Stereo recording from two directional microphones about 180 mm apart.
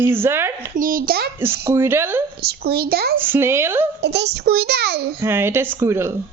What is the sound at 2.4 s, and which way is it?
Speech, 60° right (ahead or behind).